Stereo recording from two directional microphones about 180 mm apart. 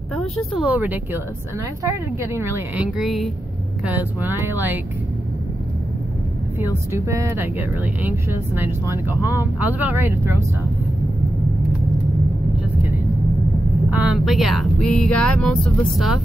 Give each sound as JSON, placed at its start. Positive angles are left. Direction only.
{"t": 0.1, "sound": "speech", "side_deg": 0}
{"t": 2.8, "sound": "speech", "side_deg": 0}
{"t": 6.6, "sound": "speech", "side_deg": -15}
{"t": 13.8, "sound": "speech", "side_deg": -5}